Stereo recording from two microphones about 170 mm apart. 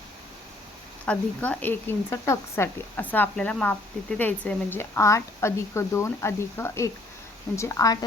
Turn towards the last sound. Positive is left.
turn(degrees=20)  # may be behind; listen again after turning